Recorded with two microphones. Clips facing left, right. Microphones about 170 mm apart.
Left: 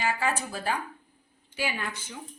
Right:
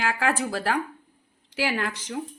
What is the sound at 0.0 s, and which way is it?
Speech, 90° right.